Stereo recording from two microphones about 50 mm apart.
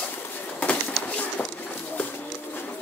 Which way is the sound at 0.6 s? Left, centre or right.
Left.